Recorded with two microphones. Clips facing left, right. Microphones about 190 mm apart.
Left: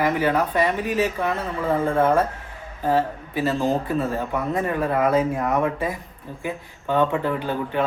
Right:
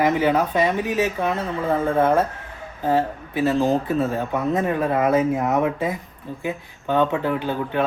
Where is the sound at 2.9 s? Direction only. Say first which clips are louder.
Right 1 dB; 15° right (ahead or behind).